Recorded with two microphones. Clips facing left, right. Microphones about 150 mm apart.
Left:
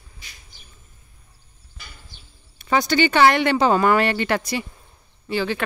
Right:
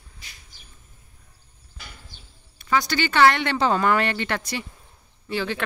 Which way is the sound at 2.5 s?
20° left (ahead or behind).